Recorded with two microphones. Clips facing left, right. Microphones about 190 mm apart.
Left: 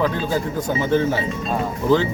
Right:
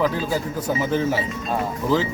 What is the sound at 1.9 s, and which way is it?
Speech, centre (ahead or behind).